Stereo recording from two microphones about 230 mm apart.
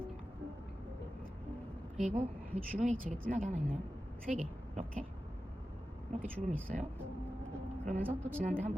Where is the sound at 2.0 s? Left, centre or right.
Right.